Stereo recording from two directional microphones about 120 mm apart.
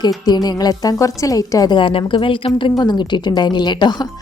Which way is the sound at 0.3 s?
35° left (ahead or behind).